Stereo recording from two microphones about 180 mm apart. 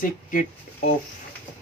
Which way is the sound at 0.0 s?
45° left (ahead or behind).